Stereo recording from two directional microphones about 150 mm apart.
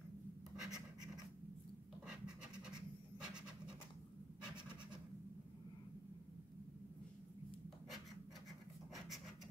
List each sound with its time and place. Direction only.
0.6 s scratch: 5° right (ahead or behind)